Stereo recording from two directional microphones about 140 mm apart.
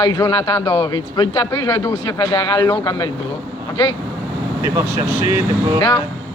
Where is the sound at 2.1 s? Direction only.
35° left (ahead or behind).